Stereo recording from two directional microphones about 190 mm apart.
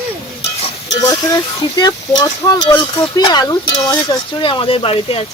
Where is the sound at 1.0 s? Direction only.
20° left (ahead or behind).